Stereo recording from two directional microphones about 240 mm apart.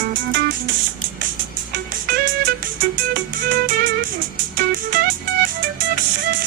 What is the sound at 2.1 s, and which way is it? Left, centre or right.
Music, right.